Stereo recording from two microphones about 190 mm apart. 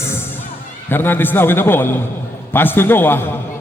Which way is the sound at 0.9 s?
10° left (ahead or behind).